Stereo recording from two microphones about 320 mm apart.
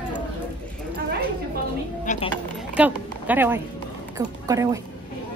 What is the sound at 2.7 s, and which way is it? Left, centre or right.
Speech, centre.